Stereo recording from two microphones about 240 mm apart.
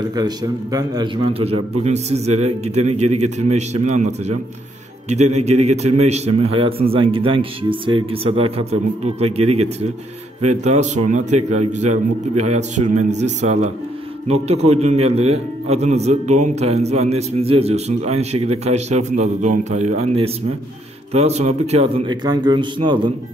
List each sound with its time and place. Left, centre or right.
0.1 s a man's voice: centre
5.4 s a man's voice: right